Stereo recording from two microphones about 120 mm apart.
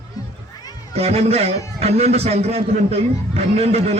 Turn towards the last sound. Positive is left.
turn(degrees=-60)  # may be behind; listen again after turning